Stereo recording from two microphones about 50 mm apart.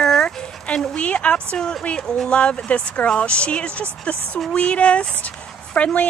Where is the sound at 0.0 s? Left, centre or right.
Centre.